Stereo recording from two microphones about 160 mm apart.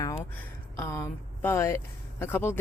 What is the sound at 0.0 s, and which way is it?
Speech, 15° left (ahead or behind).